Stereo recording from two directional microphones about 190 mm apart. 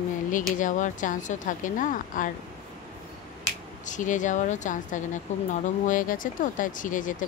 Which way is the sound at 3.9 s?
40° left (ahead or behind).